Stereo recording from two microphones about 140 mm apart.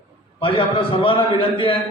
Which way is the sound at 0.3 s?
35° left (ahead or behind).